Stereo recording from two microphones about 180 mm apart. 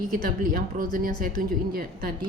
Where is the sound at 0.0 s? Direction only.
50° right (ahead or behind).